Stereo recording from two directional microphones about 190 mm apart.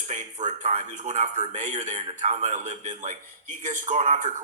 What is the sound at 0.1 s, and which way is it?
Speech, 40° right (ahead or behind).